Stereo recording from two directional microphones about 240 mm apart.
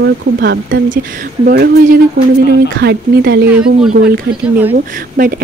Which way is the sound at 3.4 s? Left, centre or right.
Centre.